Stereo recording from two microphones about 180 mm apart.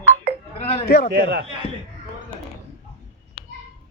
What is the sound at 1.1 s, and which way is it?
Speech, 65° right (ahead or behind).